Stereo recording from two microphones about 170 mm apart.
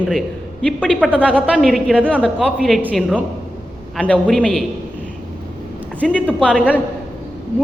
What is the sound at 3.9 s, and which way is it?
Speech, 5° left (ahead or behind).